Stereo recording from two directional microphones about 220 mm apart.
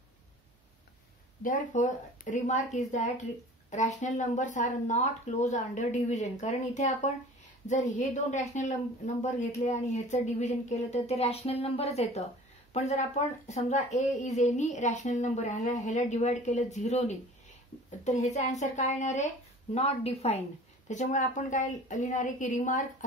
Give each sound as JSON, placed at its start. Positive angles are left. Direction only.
{"t": 1.4, "sound": "a woman's voice", "side_deg": 35}